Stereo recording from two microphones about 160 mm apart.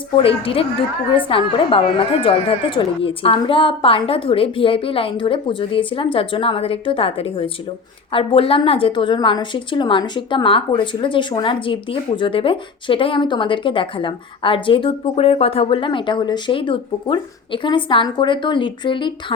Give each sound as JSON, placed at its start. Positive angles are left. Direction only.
{"t": 0.2, "sound": "a woman's voice", "side_deg": 35}